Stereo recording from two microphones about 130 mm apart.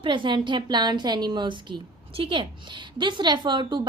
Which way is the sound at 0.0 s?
40° right (ahead or behind).